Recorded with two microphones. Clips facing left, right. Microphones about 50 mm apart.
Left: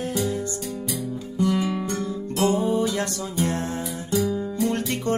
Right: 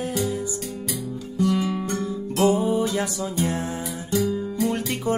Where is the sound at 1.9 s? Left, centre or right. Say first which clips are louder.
Right 1 dB; right.